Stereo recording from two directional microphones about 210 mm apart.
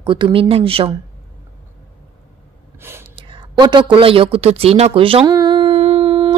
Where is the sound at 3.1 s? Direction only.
25° right (ahead or behind).